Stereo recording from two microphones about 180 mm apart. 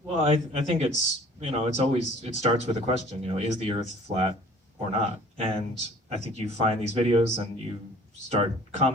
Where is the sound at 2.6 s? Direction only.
35° right (ahead or behind).